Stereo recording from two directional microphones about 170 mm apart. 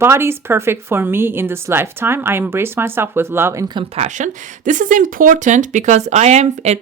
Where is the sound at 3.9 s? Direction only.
45° right (ahead or behind).